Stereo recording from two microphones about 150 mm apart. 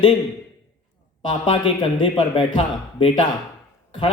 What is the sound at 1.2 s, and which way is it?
A man's voice, 35° left (ahead or behind).